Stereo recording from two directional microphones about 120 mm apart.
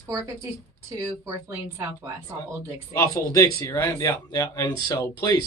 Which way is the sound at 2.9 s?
25° left (ahead or behind).